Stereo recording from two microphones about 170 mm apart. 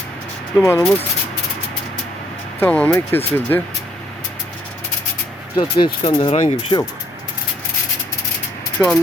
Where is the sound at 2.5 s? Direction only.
10° left (ahead or behind).